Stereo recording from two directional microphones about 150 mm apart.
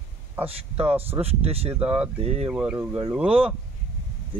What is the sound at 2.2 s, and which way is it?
Speech, 40° right (ahead or behind).